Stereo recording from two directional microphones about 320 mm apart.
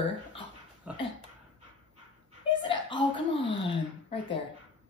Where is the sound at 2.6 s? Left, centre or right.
Centre.